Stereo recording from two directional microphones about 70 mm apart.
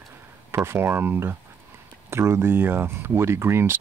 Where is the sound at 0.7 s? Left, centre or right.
Right.